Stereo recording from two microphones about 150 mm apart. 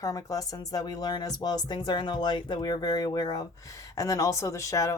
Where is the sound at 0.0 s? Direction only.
20° left (ahead or behind).